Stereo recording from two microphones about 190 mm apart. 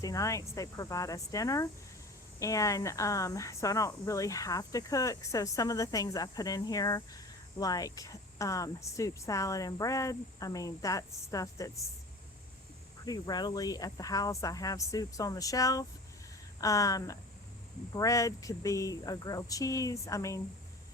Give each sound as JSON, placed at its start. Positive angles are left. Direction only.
{"t": 0.0, "sound": "speech", "side_deg": 15}
{"t": 13.1, "sound": "speech", "side_deg": 20}